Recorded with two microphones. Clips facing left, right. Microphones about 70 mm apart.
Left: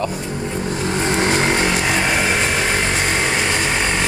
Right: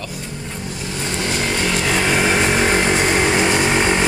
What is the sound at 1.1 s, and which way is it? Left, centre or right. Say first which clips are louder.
Vehicle: left 3 dB; left.